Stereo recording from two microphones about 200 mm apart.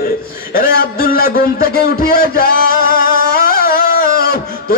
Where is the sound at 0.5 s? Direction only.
50° left (ahead or behind).